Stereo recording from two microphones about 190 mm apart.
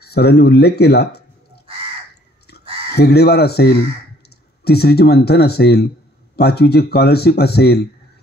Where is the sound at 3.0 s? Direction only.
60° left (ahead or behind).